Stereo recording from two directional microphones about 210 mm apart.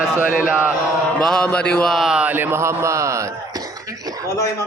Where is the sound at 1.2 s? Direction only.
Centre (ahead or behind); by 4.2 s 15° right (ahead or behind).